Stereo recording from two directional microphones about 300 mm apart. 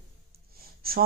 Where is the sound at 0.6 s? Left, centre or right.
Right.